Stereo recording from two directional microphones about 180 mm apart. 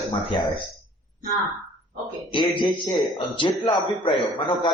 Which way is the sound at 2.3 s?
25° left (ahead or behind).